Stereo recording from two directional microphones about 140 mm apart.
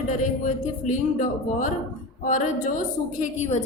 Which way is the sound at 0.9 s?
65° left (ahead or behind).